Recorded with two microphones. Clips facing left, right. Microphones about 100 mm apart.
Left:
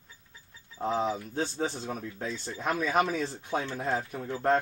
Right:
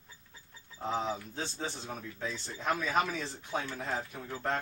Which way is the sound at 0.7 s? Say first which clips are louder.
Left 5 dB; 50° left (ahead or behind).